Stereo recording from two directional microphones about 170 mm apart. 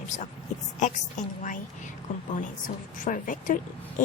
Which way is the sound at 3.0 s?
50° left (ahead or behind).